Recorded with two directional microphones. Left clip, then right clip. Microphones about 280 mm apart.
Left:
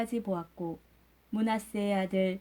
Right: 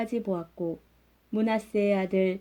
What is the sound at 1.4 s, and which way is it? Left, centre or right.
Speech, left.